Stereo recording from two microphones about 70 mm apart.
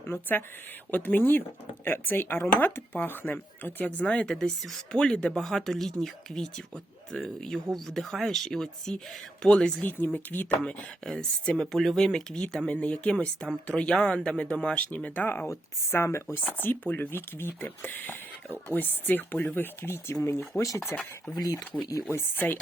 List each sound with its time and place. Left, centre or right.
0.0 s speech: left
4.0 s speech: centre
9.8 s speech: left
10.6 s speech: centre
12.7 s speech: centre
15.4 s speech: left
16.4 s speech: left
21.3 s speech: left
22.1 s speech: left